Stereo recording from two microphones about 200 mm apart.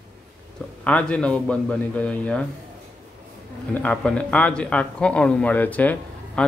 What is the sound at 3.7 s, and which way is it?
Speech, 5° left (ahead or behind).